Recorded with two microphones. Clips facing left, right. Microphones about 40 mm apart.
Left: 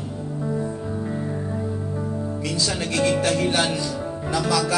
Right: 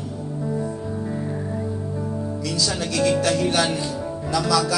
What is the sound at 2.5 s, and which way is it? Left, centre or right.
Speech, left.